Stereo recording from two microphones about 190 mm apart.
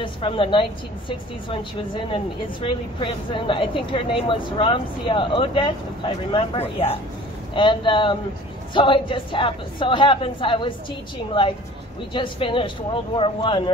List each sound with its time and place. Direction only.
0.0 s speech: 25° left (ahead or behind)